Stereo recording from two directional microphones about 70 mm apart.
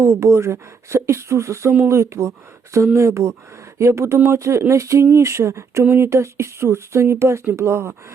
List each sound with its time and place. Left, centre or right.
0.0 s speech: right